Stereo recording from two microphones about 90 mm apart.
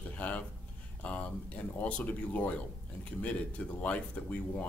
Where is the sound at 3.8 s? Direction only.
20° left (ahead or behind).